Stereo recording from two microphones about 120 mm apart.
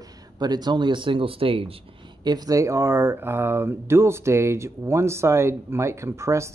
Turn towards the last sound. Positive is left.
turn(degrees=-25)  # may be behind; listen again after turning